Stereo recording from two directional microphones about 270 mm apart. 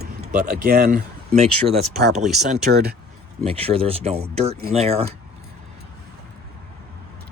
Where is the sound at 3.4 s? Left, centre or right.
Right.